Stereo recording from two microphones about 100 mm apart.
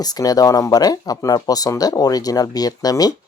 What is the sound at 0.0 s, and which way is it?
Speech, 40° left (ahead or behind).